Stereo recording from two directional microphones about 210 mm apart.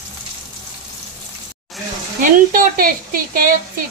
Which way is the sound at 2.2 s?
40° right (ahead or behind).